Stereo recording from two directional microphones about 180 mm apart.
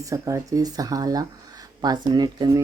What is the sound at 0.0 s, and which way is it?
Speech, 20° right (ahead or behind).